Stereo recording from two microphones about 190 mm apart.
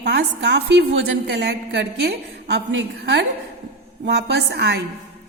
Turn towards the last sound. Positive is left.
turn(degrees=-60)  # may be behind; listen again after turning